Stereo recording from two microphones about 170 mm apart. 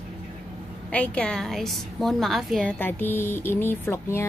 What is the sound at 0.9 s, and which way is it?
A woman's voice, 5° left (ahead or behind).